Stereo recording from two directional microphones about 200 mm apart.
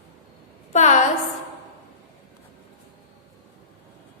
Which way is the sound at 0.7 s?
35° left (ahead or behind).